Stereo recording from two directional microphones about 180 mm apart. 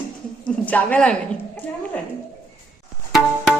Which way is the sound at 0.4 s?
10° left (ahead or behind).